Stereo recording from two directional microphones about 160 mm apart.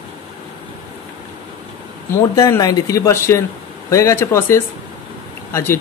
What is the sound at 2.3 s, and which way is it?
Speech, 20° left (ahead or behind).